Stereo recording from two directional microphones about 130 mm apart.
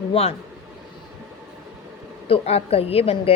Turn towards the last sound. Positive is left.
turn(degrees=50)  # may be behind; listen again after turning